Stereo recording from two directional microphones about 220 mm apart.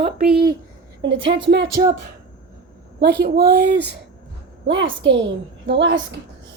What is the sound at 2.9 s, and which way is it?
Speech, 50° right (ahead or behind).